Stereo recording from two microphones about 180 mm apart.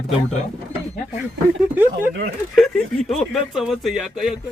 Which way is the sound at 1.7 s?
10° right (ahead or behind).